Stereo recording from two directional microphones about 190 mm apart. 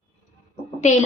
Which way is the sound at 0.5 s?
40° left (ahead or behind).